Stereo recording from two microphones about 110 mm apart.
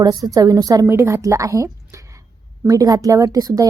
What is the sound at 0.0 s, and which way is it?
A woman's voice, 35° right (ahead or behind).